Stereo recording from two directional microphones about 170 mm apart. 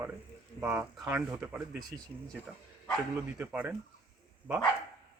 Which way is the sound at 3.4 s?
10° right (ahead or behind).